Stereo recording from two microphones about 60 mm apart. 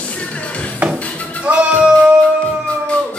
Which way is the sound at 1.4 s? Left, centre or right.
Centre.